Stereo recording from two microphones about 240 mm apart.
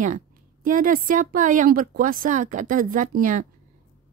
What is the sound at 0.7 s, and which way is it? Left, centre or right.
Speech, right.